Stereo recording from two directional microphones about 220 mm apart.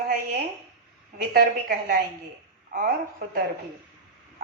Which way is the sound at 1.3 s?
40° right (ahead or behind).